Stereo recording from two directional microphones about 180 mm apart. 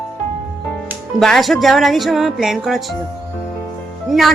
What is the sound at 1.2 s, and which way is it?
Speech, centre (ahead or behind).